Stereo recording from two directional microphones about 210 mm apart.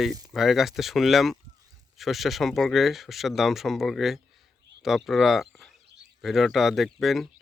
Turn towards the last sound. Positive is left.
turn(degrees=0)  # may be behind; listen again after turning